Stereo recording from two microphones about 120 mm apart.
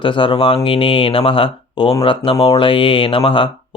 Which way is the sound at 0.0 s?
45° left (ahead or behind).